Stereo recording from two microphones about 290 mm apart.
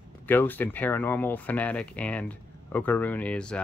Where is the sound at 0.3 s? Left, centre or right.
Centre.